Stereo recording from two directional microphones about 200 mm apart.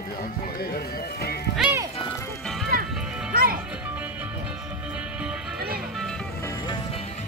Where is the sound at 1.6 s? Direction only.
10° right (ahead or behind).